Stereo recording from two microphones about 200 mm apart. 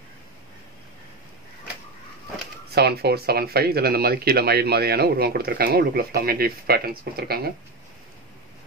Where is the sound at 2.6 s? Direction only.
55° right (ahead or behind).